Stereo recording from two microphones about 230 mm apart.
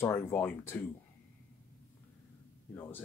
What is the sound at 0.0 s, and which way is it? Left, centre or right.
Speech, centre.